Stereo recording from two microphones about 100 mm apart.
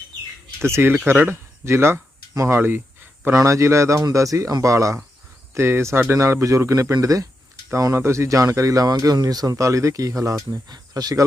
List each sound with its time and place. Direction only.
0.6 s speech: 25° right (ahead or behind)
3.2 s speech: 30° right (ahead or behind)